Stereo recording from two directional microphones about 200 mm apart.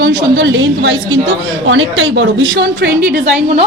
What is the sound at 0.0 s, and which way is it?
A woman's voice, 60° right (ahead or behind).